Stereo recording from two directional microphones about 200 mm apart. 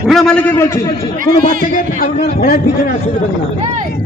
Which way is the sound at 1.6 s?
40° left (ahead or behind).